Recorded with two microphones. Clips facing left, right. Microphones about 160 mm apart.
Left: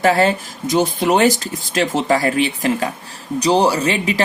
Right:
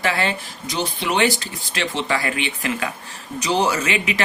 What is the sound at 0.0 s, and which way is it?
Speech, 40° left (ahead or behind).